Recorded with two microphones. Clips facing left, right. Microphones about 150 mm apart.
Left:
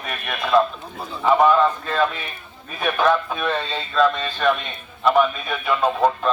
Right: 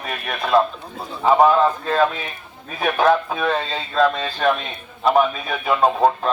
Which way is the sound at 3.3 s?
35° right (ahead or behind).